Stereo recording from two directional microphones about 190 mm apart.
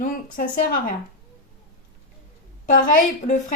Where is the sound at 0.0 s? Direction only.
45° left (ahead or behind).